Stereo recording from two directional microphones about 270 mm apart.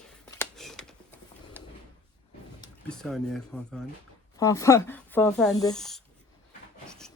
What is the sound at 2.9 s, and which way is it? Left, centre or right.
A woman's voice, centre.